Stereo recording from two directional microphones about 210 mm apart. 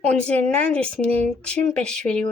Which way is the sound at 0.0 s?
5° left (ahead or behind).